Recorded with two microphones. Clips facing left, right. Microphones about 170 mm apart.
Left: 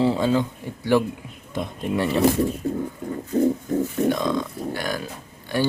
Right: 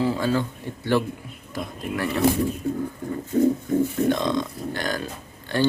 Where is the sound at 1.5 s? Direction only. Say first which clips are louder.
Left 4 dB; 25° left (ahead or behind).